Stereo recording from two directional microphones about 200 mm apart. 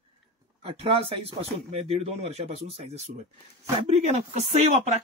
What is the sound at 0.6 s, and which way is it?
Speech, 25° right (ahead or behind).